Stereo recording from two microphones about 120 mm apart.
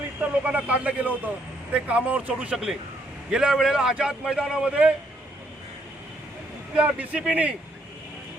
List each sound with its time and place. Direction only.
0.2 s a man's voice: 10° right (ahead or behind)
6.7 s speech: 10° right (ahead or behind)